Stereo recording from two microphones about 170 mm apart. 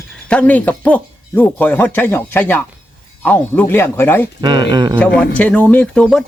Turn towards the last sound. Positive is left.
turn(degrees=0)  # may be behind; listen again after turning